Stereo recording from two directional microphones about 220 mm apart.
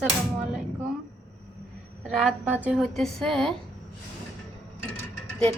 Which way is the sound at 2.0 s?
Centre (ahead or behind).